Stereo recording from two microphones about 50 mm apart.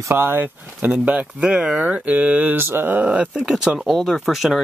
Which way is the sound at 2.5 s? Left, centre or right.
Right.